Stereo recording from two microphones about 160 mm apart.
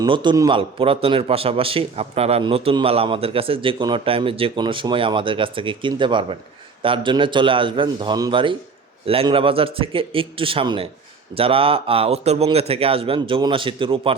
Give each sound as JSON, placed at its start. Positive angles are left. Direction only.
{"t": 0.0, "sound": "a man's voice", "side_deg": -30}